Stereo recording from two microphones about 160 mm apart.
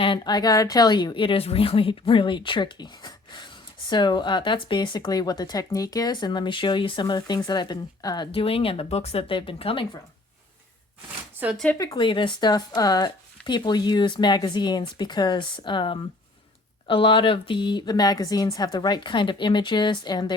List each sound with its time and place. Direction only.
0.0 s speech: 30° left (ahead or behind)
11.5 s speech: 5° left (ahead or behind)
11.8 s speech: 25° left (ahead or behind)